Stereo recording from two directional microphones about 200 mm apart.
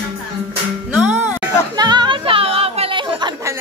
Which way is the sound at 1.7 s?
20° right (ahead or behind).